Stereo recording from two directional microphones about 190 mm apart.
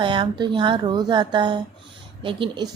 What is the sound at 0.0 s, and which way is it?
A woman's voice, 25° right (ahead or behind).